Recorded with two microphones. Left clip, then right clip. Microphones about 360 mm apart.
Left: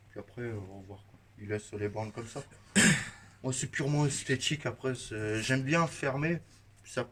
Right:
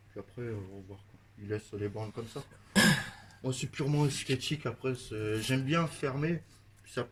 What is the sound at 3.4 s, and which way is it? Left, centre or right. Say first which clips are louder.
Speech: left 2 dB; centre.